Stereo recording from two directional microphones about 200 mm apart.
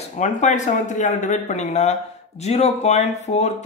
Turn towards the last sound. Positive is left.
turn(degrees=35)  # may be behind; listen again after turning